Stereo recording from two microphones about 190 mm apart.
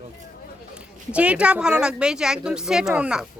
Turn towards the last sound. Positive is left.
turn(degrees=-5)  # may be behind; listen again after turning